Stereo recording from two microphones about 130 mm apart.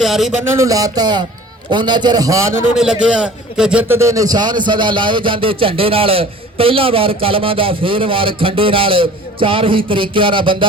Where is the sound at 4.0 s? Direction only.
25° right (ahead or behind).